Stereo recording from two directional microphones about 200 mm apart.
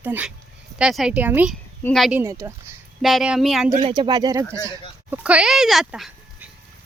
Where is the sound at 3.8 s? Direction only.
25° right (ahead or behind); by 6.4 s centre (ahead or behind).